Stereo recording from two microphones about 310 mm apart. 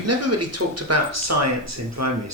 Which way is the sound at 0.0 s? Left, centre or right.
Right.